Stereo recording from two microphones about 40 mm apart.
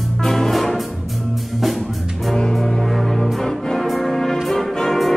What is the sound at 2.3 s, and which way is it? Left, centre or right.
Music, centre.